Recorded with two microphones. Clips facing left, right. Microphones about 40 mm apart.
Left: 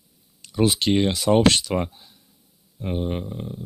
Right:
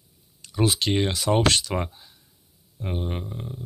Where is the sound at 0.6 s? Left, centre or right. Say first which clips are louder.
Left 3 dB; centre.